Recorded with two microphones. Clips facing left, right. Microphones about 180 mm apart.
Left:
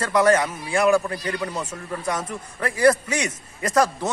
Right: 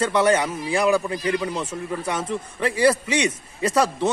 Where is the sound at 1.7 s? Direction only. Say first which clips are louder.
Right 1 dB; 30° right (ahead or behind).